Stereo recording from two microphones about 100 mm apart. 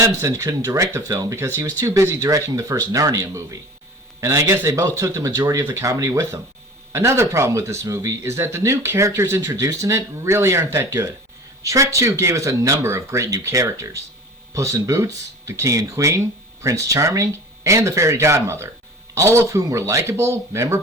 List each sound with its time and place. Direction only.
0.2 s speech: 30° right (ahead or behind)